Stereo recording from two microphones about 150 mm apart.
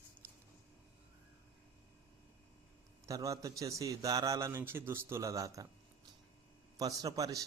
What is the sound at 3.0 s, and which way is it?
Speech, 25° right (ahead or behind).